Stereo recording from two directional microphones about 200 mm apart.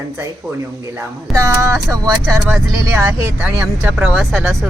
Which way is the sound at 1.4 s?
15° right (ahead or behind).